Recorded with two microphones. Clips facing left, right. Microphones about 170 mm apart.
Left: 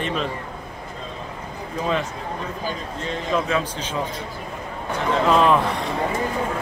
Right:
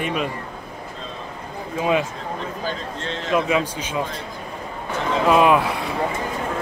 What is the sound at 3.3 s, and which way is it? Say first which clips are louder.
Speech: right 3 dB; 10° right (ahead or behind).